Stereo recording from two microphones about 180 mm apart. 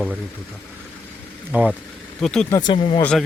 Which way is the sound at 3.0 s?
5° left (ahead or behind).